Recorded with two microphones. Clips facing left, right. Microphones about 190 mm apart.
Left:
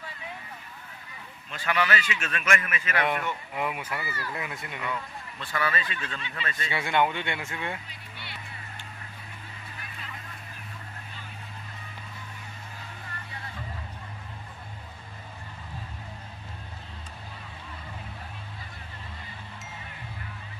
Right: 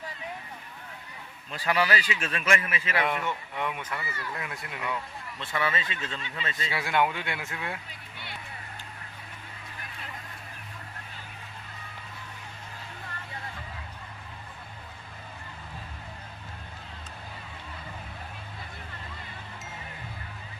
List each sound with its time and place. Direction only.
1.5 s a man's voice: 35° right (ahead or behind)
3.0 s speech: centre (ahead or behind)
5.4 s a man's voice: 20° right (ahead or behind)
6.7 s speech: centre (ahead or behind)